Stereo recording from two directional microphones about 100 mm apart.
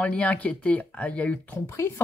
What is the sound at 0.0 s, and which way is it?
Speech, 15° left (ahead or behind).